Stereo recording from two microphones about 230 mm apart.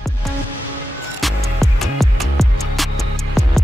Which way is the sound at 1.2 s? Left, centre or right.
Centre.